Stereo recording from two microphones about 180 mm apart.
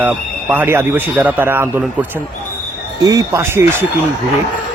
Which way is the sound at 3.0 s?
15° right (ahead or behind).